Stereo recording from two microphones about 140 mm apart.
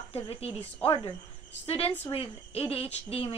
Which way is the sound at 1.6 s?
45° left (ahead or behind).